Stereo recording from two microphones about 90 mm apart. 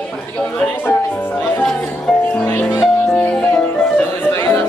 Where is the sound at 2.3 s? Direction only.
20° left (ahead or behind).